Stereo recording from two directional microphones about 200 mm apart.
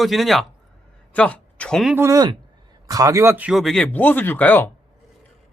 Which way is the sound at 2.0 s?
15° right (ahead or behind).